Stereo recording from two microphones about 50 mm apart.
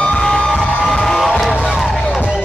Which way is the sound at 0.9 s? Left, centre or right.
Centre.